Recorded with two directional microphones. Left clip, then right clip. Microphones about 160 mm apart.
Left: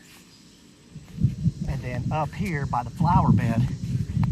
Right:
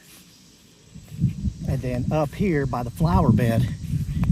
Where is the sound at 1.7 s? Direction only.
50° left (ahead or behind); by 3.7 s 70° left (ahead or behind).